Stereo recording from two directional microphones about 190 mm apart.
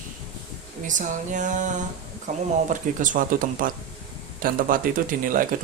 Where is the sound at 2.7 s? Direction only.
45° right (ahead or behind).